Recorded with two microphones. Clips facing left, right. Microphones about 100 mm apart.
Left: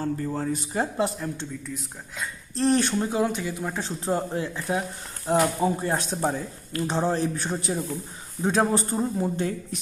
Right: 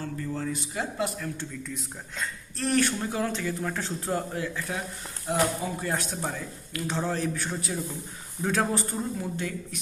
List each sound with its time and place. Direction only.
0.0 s speech: 35° left (ahead or behind)
1.7 s speech: 5° left (ahead or behind)
2.6 s speech: 25° left (ahead or behind)